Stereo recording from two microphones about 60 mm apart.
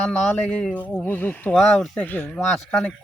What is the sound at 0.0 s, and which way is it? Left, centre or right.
Speech, left.